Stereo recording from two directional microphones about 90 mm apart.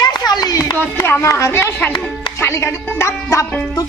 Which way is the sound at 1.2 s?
30° left (ahead or behind).